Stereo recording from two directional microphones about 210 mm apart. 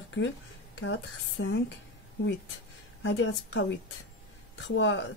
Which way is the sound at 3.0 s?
60° left (ahead or behind).